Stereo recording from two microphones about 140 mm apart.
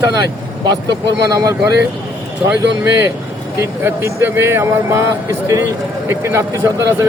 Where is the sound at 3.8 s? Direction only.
15° right (ahead or behind).